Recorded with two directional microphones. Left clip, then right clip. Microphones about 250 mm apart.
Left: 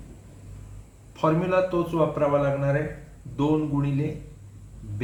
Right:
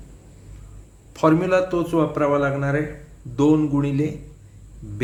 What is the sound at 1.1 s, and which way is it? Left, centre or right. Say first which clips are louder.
Speech: right 5 dB; right.